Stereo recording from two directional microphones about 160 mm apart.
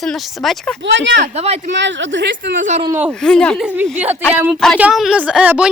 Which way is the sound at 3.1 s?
5° left (ahead or behind).